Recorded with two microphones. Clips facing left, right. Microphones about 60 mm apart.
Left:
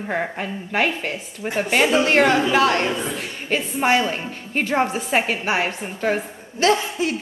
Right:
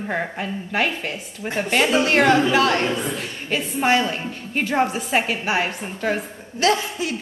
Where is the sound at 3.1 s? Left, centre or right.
Centre.